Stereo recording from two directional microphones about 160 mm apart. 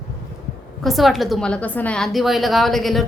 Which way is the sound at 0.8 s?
Centre (ahead or behind).